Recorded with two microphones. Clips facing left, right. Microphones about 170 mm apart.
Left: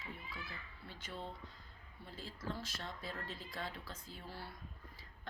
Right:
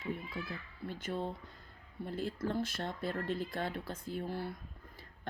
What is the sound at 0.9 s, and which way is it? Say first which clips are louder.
Speech: right 10 dB; 50° right (ahead or behind).